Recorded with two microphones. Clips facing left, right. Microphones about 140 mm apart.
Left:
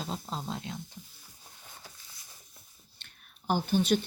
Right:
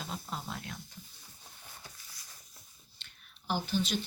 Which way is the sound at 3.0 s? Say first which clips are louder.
Left 6 dB; 50° left (ahead or behind).